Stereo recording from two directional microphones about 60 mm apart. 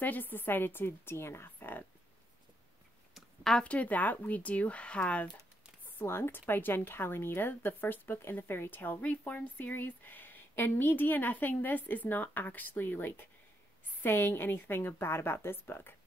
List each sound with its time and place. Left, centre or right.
0.0 s a woman's voice: left
3.6 s speech: left
6.0 s a woman's voice: left